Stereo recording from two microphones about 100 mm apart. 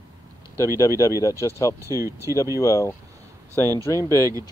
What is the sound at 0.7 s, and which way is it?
Speech, 30° left (ahead or behind).